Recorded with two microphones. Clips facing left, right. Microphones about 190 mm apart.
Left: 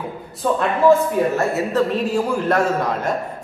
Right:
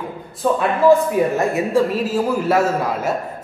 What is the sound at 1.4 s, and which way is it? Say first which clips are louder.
Speech: right 2 dB; 15° right (ahead or behind).